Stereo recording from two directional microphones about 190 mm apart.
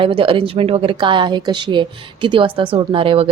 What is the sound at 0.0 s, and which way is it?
A woman's voice, 25° right (ahead or behind).